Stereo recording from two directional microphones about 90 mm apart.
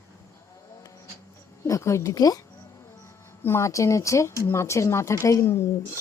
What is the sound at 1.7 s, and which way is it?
Speech, 35° left (ahead or behind).